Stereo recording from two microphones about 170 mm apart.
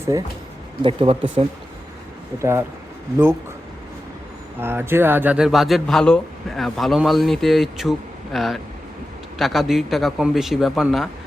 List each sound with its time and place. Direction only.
0.1 s speech: 20° right (ahead or behind)
0.8 s speech: 30° right (ahead or behind)
2.4 s speech: 15° right (ahead or behind)
4.6 s speech: 15° right (ahead or behind)